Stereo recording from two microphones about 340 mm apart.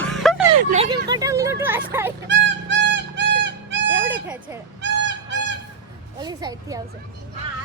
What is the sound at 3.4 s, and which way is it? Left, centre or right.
Music, right.